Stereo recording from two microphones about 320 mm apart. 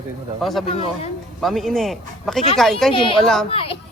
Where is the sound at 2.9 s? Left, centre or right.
Centre.